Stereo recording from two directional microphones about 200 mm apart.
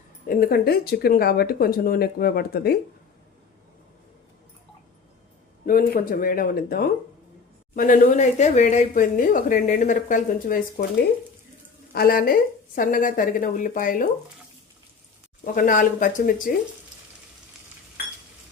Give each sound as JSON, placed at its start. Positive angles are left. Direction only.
{"t": 0.3, "sound": "speech", "side_deg": 50}
{"t": 5.6, "sound": "speech", "side_deg": 45}
{"t": 11.9, "sound": "speech", "side_deg": 45}
{"t": 15.5, "sound": "speech", "side_deg": 40}